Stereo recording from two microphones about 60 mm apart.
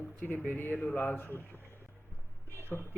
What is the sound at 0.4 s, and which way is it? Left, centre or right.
Speech, left.